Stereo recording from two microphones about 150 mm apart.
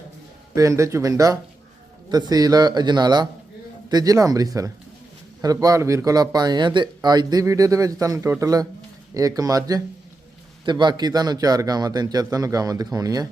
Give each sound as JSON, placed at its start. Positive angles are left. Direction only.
{"t": 0.5, "sound": "a man's voice", "side_deg": -20}